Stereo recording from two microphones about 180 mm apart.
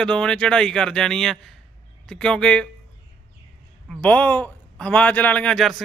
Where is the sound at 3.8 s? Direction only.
10° left (ahead or behind).